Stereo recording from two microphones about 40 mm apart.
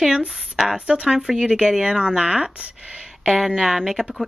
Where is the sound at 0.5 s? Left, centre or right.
Centre.